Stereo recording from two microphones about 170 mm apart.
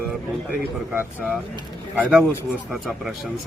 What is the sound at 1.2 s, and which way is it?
Speech, 5° left (ahead or behind).